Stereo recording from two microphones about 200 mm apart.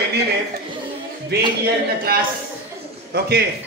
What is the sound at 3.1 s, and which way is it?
Speech, 50° right (ahead or behind).